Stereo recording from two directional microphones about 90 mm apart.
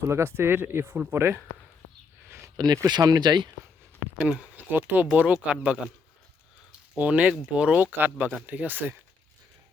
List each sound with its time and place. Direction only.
0.0 s speech: 30° right (ahead or behind)
2.8 s speech: 45° right (ahead or behind)
4.2 s speech: 15° right (ahead or behind)